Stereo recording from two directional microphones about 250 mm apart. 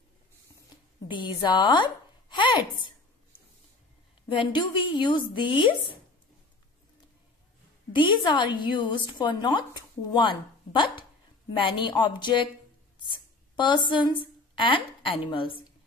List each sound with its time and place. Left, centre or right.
1.0 s speech: centre
4.3 s a woman's voice: centre
7.9 s a woman's voice: centre